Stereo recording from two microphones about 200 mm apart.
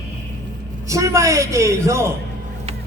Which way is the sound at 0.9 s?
15° right (ahead or behind).